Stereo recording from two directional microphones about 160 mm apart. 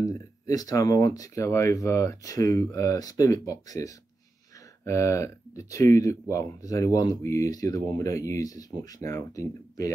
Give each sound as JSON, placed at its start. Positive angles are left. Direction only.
{"t": 0.0, "sound": "speech", "side_deg": 20}